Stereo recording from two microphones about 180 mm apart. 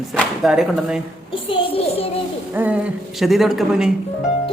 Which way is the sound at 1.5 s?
30° left (ahead or behind).